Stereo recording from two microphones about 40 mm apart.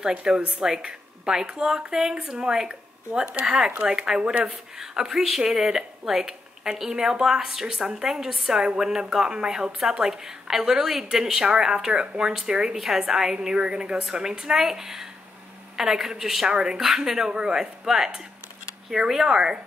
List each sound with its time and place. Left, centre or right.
0.2 s a woman's voice: right
3.4 s a woman's voice: centre
16.4 s speech: centre
16.7 s a woman's voice: centre